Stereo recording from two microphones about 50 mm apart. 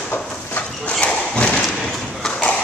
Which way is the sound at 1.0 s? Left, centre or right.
Left.